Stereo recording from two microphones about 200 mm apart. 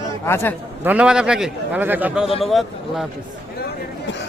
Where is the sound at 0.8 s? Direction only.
5° right (ahead or behind).